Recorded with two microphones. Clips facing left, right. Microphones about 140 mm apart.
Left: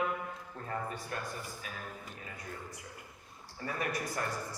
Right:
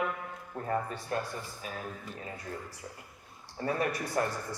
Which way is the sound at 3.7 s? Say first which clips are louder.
Right 5 dB; 30° right (ahead or behind).